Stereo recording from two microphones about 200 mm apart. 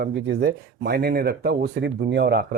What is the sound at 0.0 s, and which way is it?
Speech, 50° right (ahead or behind).